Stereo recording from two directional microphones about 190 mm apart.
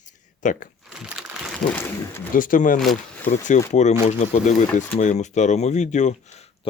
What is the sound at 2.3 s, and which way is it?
Speech, 45° left (ahead or behind).